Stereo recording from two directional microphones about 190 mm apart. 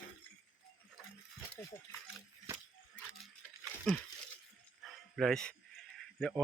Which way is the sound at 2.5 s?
15° right (ahead or behind).